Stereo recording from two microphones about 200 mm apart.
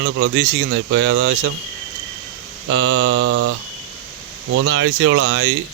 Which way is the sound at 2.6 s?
80° right.